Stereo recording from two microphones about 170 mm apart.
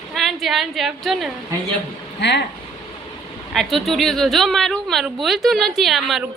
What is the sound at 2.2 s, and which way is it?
Speech, 90° left.